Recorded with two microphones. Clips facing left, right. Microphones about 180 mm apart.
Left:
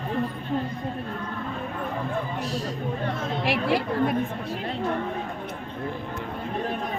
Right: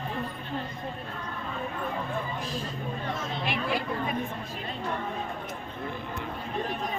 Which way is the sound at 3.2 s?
75° left (ahead or behind).